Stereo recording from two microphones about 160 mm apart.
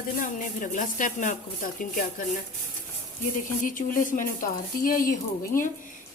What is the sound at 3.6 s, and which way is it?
Speech, 55° left (ahead or behind).